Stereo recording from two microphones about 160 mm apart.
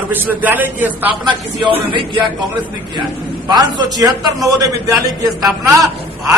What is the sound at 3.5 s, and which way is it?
A man's voice, 25° right (ahead or behind).